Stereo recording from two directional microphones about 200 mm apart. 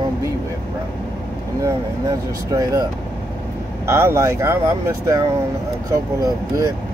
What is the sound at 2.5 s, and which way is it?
Speech, 20° right (ahead or behind).